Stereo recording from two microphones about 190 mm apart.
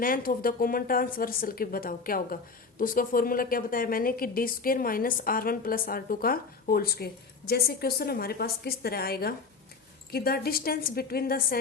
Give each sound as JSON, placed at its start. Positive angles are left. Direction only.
{"t": 0.0, "sound": "speech", "side_deg": 45}